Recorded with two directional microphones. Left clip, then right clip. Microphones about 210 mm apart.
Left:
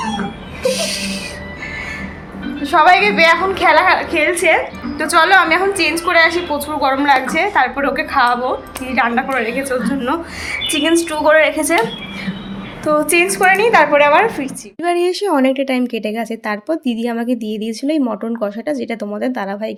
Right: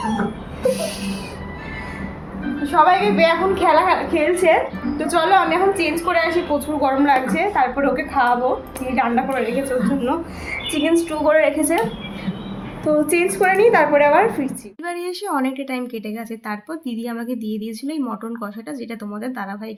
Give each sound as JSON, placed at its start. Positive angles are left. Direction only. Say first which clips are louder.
{"t": 2.6, "sound": "a woman's voice", "louder": "left 4 dB", "side_deg": 15}
{"t": 13.1, "sound": "a woman's voice", "louder": "left 5 dB", "side_deg": -5}
{"t": 14.8, "sound": "speech", "louder": "left 10 dB", "side_deg": 35}